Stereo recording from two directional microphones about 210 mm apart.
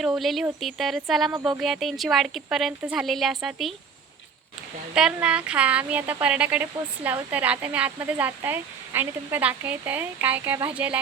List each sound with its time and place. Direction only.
0.0 s speech: centre (ahead or behind)
4.9 s speech: 5° right (ahead or behind)